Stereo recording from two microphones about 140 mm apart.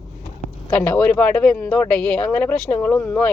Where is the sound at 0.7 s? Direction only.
10° left (ahead or behind).